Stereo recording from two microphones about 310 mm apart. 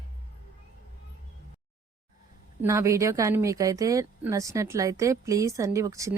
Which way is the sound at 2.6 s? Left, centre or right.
Centre.